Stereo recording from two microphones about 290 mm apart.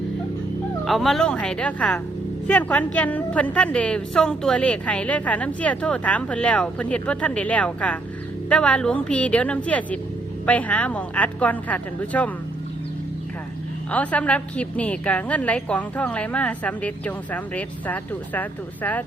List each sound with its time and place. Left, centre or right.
0.9 s a woman's voice: centre
13.9 s a woman's voice: centre